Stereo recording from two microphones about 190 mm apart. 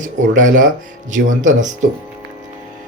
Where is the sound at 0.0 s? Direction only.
45° right (ahead or behind).